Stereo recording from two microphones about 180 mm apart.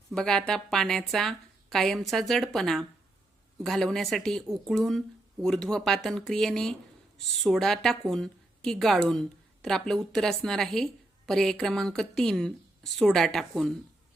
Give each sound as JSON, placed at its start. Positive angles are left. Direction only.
{"t": 0.1, "sound": "a woman's voice", "side_deg": 5}